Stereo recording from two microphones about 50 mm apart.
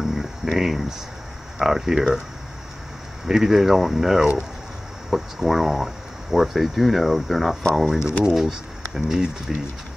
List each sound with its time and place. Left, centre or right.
0.0 s a sound: centre
1.6 s speech: centre
3.3 s speech: centre